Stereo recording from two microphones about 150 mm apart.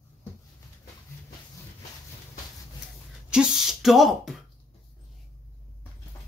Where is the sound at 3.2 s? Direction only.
5° right (ahead or behind).